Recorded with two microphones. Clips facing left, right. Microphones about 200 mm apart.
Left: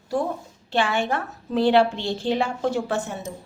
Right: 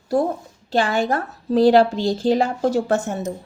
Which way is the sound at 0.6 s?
40° right (ahead or behind).